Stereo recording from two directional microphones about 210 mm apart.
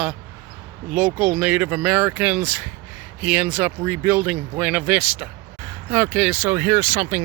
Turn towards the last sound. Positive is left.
turn(degrees=-10)  # may be behind; listen again after turning